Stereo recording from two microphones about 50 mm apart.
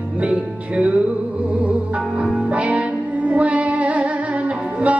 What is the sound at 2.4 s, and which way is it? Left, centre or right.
Music, right.